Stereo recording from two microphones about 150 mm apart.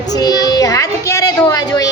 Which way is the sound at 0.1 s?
25° left (ahead or behind).